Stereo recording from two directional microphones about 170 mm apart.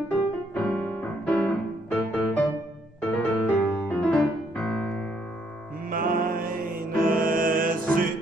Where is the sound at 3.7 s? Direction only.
10° left (ahead or behind).